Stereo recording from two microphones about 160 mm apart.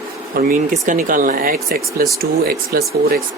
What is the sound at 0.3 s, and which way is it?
Speech, 65° right (ahead or behind).